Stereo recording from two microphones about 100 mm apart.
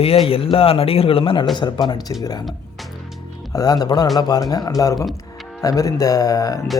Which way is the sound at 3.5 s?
40° left (ahead or behind).